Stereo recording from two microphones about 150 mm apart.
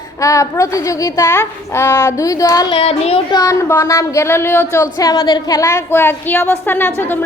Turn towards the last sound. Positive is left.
turn(degrees=15)  # may be behind; listen again after turning